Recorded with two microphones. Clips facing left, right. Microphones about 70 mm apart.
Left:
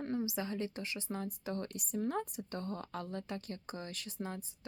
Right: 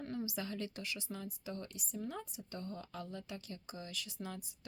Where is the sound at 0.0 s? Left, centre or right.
Left.